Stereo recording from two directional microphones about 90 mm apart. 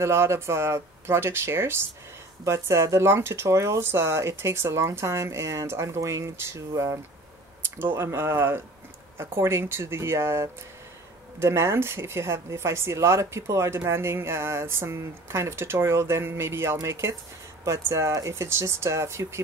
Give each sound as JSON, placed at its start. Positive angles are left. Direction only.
{"t": 0.0, "sound": "speech", "side_deg": -30}